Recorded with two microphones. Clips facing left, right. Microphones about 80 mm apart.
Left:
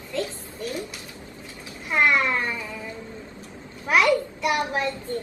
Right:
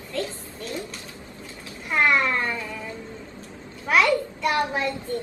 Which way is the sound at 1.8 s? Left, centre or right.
Centre.